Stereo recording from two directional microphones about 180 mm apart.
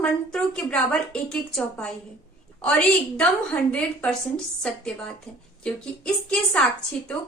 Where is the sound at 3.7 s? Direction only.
5° left (ahead or behind).